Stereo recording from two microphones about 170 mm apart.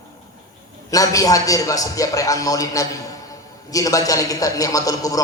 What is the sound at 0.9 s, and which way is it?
A man's voice, 20° left (ahead or behind).